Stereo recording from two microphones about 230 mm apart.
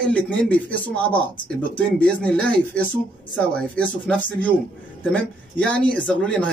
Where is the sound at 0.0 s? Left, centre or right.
Centre.